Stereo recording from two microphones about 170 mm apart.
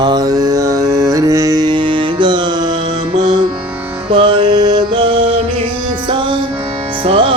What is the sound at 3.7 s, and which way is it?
Music, 10° right (ahead or behind).